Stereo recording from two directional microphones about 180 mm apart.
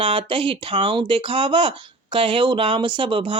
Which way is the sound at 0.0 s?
30° right (ahead or behind).